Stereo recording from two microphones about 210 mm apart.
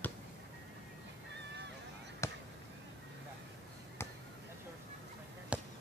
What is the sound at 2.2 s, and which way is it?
Basketball bounce, 15° left (ahead or behind).